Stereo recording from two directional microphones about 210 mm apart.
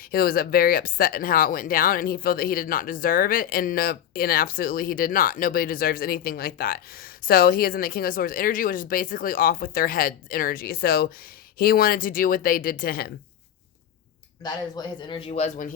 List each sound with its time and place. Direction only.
0.1 s speech: 45° left (ahead or behind)
14.4 s speech: 20° left (ahead or behind); by 15.7 s 35° left (ahead or behind)